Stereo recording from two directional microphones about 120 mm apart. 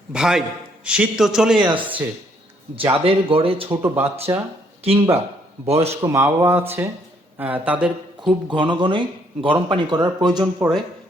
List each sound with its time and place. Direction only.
0.1 s a man's voice: 5° right (ahead or behind)
1.7 s speech: 45° right (ahead or behind)
3.7 s speech: 20° right (ahead or behind)
4.8 s speech: 55° right (ahead or behind)
6.0 s speech: 25° right (ahead or behind); by 8.4 s 5° right (ahead or behind)
8.4 s speech: 40° right (ahead or behind)